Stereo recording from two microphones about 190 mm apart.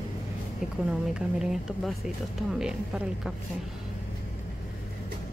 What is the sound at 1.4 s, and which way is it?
Speech, centre (ahead or behind).